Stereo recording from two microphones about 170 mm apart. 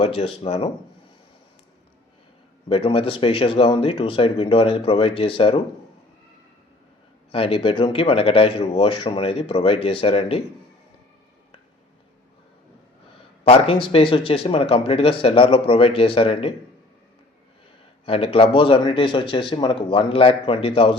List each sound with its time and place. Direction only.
0.0 s speech: 35° left (ahead or behind)
2.6 s speech: 35° left (ahead or behind)
7.3 s speech: 35° left (ahead or behind)
13.5 s speech: 30° left (ahead or behind)
18.0 s speech: 35° left (ahead or behind)